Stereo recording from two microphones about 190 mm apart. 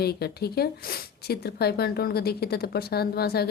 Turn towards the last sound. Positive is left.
turn(degrees=55)  # may be behind; listen again after turning